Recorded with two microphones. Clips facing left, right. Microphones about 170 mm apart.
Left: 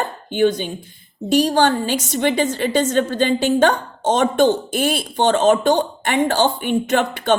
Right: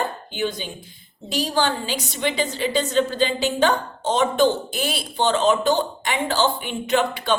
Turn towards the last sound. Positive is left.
turn(degrees=50)  # may be behind; listen again after turning